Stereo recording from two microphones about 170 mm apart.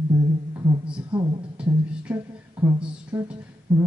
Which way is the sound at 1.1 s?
30° right (ahead or behind).